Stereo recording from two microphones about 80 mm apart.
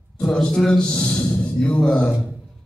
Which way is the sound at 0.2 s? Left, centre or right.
Centre.